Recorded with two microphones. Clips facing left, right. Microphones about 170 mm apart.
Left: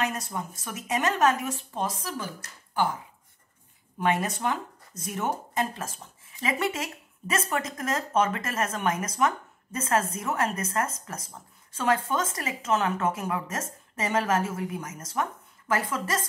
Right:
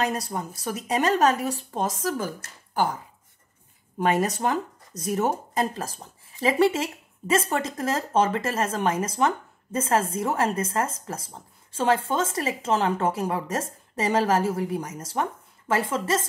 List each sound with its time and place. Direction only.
0.0 s speech: 35° right (ahead or behind)
4.0 s speech: 40° right (ahead or behind)